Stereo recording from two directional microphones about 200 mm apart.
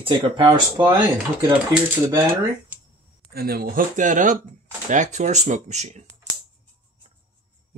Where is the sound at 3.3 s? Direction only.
50° right (ahead or behind).